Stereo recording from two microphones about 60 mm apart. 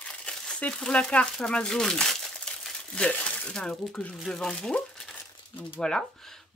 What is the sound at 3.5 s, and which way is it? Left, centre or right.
Speech, centre.